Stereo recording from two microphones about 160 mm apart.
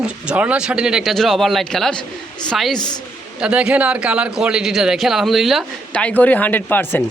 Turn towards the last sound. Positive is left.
turn(degrees=10)  # may be behind; listen again after turning